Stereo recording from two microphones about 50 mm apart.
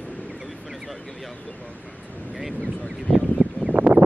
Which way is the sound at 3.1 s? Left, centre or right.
Centre.